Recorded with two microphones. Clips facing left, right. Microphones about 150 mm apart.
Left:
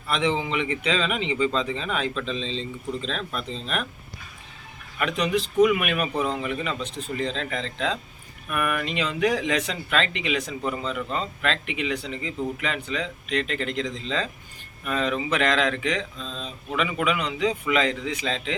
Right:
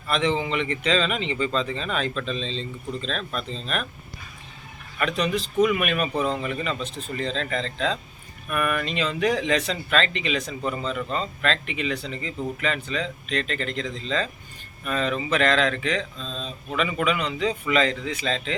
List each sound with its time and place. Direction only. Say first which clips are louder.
0.1 s speech: right 1 dB; 15° left (ahead or behind)
4.9 s speech: even; 15° left (ahead or behind)
16.1 s speech: right 1 dB; 20° right (ahead or behind)
16.4 s speech: even; 15° left (ahead or behind)